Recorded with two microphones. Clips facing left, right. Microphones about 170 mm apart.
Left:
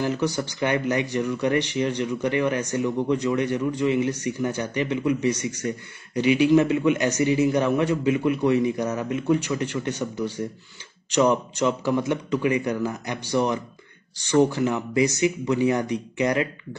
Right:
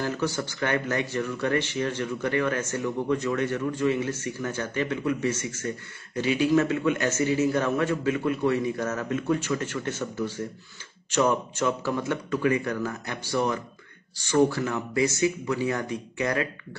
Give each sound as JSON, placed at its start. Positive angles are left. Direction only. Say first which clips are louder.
{"t": 0.0, "sound": "speech", "louder": "left 3 dB", "side_deg": 15}